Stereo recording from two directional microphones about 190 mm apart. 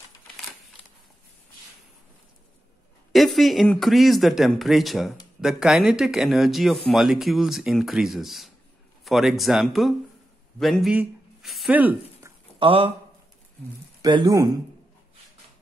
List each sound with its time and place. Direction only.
3.1 s speech: centre (ahead or behind)
12.5 s speech: 30° right (ahead or behind)
14.0 s speech: 20° right (ahead or behind)